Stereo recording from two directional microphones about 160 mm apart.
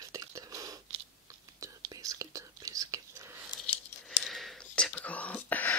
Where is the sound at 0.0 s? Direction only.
20° right (ahead or behind).